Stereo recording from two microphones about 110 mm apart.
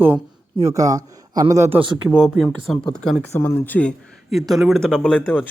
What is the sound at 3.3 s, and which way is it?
Speech, 20° left (ahead or behind).